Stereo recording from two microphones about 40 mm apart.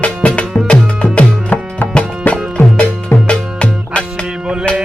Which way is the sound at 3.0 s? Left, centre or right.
Left.